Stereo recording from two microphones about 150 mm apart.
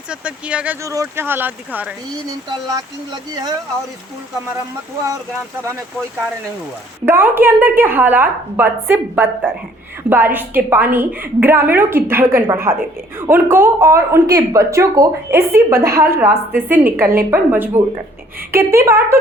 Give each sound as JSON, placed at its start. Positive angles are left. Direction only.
{"t": 0.1, "sound": "a woman's voice", "side_deg": -5}
{"t": 0.9, "sound": "a woman's voice", "side_deg": -20}
{"t": 2.5, "sound": "speech", "side_deg": -25}
{"t": 7.0, "sound": "a woman's voice", "side_deg": -15}